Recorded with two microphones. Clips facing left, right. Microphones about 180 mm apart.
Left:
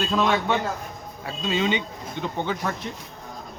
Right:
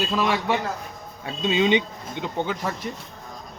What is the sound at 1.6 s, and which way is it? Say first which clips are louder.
Speech: right 4 dB; 20° right (ahead or behind).